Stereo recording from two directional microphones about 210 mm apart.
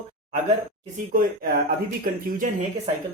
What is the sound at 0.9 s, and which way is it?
Speech, 40° right (ahead or behind).